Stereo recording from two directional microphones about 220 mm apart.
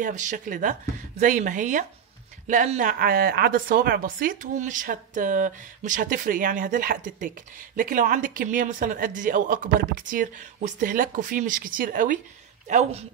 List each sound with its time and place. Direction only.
0.0 s a woman's voice: 35° right (ahead or behind)